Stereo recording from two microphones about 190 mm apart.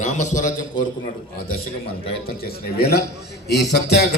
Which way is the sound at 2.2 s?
50° left (ahead or behind).